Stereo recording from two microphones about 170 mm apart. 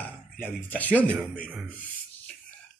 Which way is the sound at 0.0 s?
10° left (ahead or behind).